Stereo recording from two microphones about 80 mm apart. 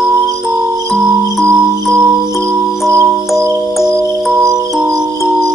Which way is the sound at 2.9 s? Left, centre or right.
Right.